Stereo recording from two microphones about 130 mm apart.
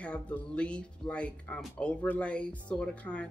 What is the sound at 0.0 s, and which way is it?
Speech, 10° left (ahead or behind).